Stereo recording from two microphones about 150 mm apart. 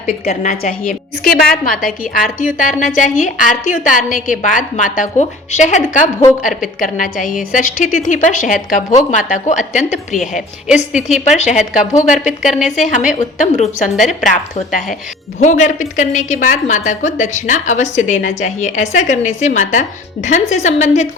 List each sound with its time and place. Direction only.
0.5 s a woman's voice: 70° left (ahead or behind); by 10.2 s 55° left (ahead or behind)
11.3 s a woman's voice: 50° left (ahead or behind)
12.5 s a woman's voice: centre (ahead or behind)
12.7 s a woman's voice: 55° left (ahead or behind)